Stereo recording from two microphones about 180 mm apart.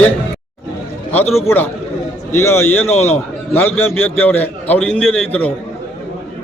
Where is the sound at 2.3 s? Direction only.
15° left (ahead or behind).